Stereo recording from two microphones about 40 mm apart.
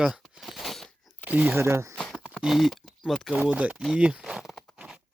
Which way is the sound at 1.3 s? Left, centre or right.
Right.